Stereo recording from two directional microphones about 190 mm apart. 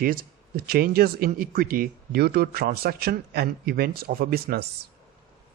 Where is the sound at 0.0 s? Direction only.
50° right (ahead or behind).